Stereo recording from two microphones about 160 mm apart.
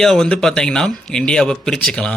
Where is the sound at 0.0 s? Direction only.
Centre (ahead or behind).